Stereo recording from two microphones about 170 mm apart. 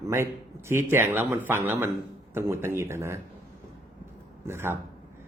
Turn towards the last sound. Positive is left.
turn(degrees=-15)  # may be behind; listen again after turning